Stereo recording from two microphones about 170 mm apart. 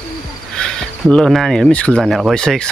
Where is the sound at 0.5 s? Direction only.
5° left (ahead or behind).